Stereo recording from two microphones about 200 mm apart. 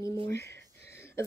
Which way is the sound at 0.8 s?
10° left (ahead or behind).